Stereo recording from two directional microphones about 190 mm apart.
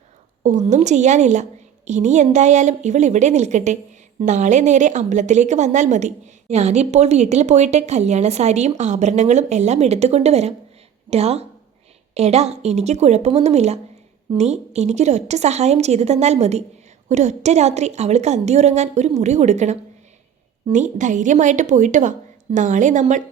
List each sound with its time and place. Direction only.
0.4 s a woman's voice: 40° right (ahead or behind)